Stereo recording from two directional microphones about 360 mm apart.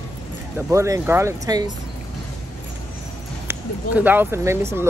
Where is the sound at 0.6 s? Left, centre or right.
Centre.